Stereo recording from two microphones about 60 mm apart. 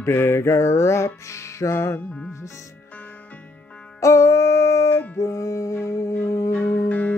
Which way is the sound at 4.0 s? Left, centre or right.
Left.